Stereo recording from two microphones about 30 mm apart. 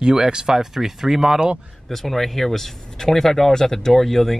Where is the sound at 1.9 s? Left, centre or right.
Centre.